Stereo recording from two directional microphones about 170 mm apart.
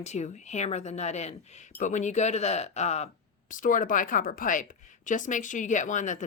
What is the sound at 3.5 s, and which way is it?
A woman's voice, 50° left (ahead or behind).